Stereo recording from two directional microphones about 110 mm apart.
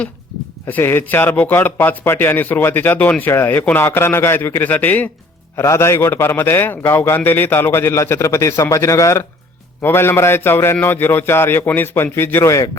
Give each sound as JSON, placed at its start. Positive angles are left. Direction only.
{"t": 0.7, "sound": "speech", "side_deg": 20}
{"t": 5.5, "sound": "speech", "side_deg": 25}